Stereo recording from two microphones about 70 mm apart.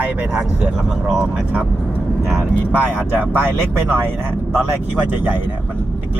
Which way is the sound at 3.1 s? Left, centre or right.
Right.